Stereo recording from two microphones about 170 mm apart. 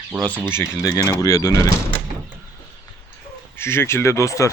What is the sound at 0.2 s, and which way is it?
Speech, 10° left (ahead or behind).